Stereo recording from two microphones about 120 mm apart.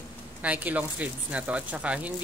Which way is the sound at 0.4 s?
10° right (ahead or behind).